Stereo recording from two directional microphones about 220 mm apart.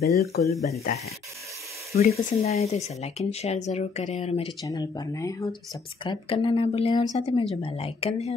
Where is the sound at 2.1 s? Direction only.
30° left (ahead or behind).